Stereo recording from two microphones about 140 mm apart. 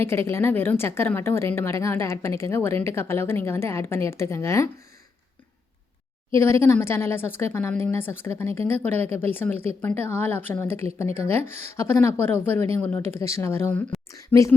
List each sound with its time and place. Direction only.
0.0 s speech: 15° left (ahead or behind)
6.3 s speech: 20° left (ahead or behind)